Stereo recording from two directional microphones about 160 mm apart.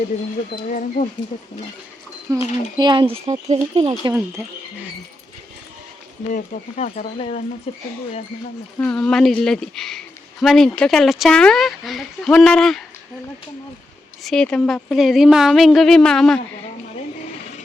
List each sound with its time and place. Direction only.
0.5 s speech: 55° left (ahead or behind)
2.4 s speech: 45° left (ahead or behind)
2.7 s speech: 30° right (ahead or behind)
6.3 s speech: 45° left (ahead or behind)
8.8 s a woman's voice: 5° left (ahead or behind)
14.3 s a woman's voice: 5° left (ahead or behind)